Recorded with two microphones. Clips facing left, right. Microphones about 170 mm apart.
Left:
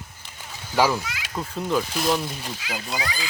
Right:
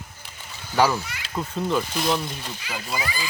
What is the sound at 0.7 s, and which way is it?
A child's voice, 10° left (ahead or behind).